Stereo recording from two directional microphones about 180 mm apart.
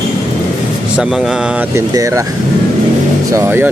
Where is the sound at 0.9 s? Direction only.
5° right (ahead or behind).